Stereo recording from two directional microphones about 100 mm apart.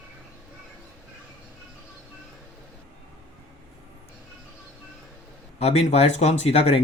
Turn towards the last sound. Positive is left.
turn(degrees=90)